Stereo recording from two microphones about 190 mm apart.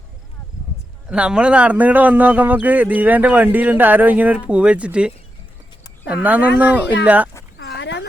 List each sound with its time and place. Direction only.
1.0 s a man's voice: 5° right (ahead or behind)
7.6 s dog: 65° left (ahead or behind)